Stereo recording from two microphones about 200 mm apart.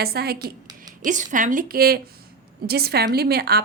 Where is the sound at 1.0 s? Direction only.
40° right (ahead or behind).